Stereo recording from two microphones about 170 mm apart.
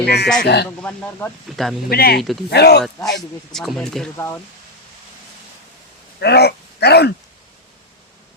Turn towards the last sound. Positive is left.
turn(degrees=75)  # may be behind; listen again after turning